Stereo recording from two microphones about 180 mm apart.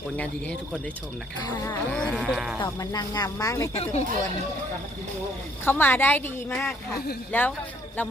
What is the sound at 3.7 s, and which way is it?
Speech, 35° left (ahead or behind).